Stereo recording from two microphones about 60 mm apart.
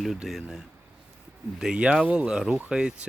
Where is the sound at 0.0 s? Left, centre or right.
Centre.